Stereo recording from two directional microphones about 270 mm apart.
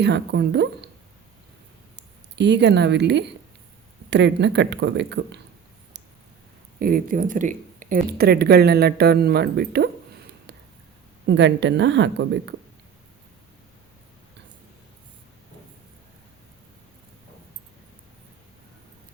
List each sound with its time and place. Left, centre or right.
0.0 s speech: right
2.0 s speech: right
6.7 s speech: right